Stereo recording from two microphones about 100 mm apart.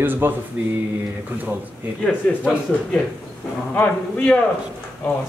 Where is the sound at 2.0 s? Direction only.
10° left (ahead or behind).